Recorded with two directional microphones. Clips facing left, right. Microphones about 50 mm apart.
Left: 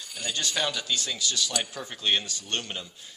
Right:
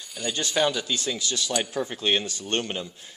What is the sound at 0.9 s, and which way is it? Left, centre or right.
Speech, right.